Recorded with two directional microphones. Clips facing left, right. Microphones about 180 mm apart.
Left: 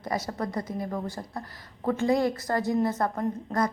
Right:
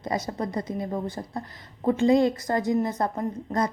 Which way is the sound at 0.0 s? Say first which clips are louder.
Right 2 dB; 20° right (ahead or behind).